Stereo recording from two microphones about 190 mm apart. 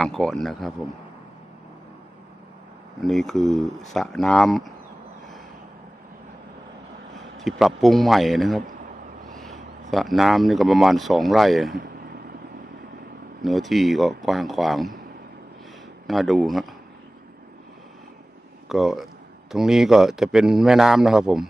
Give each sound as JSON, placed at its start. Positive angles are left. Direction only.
{"t": 0.0, "sound": "speech", "side_deg": 0}
{"t": 3.0, "sound": "speech", "side_deg": 0}
{"t": 7.3, "sound": "speech", "side_deg": 0}
{"t": 8.6, "sound": "a sound", "side_deg": -40}
{"t": 9.8, "sound": "speech", "side_deg": 0}
{"t": 11.8, "sound": "a sound", "side_deg": -55}
{"t": 13.4, "sound": "speech", "side_deg": 0}
{"t": 16.1, "sound": "speech", "side_deg": 0}
{"t": 18.7, "sound": "speech", "side_deg": 0}